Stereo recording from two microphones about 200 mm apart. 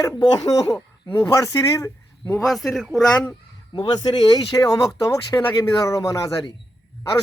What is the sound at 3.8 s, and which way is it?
Speech, 20° left (ahead or behind).